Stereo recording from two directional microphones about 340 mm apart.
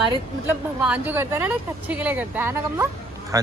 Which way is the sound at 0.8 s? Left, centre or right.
Centre.